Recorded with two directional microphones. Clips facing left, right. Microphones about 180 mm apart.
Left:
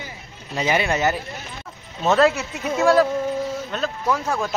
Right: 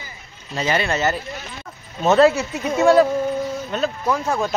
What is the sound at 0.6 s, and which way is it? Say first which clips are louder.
Speech: even; 15° left (ahead or behind).